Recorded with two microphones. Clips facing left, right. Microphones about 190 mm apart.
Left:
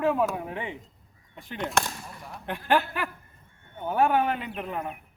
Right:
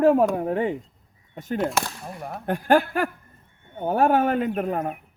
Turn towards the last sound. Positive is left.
turn(degrees=-45)  # may be behind; listen again after turning